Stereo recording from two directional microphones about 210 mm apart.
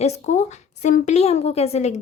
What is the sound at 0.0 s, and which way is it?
A woman's voice, 30° left (ahead or behind).